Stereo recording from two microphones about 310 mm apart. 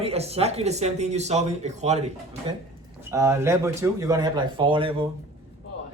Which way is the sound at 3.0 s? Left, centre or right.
Centre.